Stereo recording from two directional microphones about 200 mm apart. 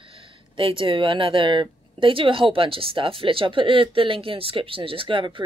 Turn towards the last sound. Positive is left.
turn(degrees=-25)  # may be behind; listen again after turning